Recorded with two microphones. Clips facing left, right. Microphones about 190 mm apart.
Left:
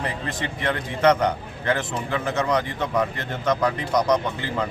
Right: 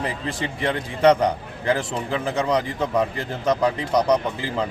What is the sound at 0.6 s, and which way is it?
A man's voice, 30° right (ahead or behind).